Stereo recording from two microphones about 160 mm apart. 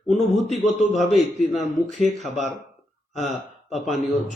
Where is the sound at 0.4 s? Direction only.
50° left (ahead or behind).